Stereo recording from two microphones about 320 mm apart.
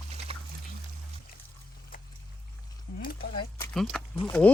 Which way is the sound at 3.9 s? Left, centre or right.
Centre.